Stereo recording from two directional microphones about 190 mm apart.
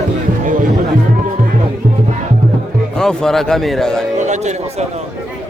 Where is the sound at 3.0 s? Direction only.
5° left (ahead or behind).